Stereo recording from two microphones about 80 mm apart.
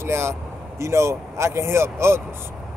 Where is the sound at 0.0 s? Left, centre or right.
Right.